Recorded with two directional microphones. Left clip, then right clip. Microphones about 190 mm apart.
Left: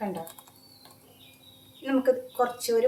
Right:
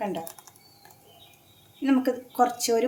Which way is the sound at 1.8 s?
60° right (ahead or behind).